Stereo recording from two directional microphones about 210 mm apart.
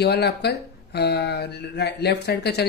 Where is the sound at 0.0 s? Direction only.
50° left (ahead or behind).